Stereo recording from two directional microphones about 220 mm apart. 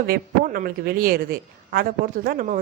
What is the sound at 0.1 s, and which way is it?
A woman's voice, 40° right (ahead or behind).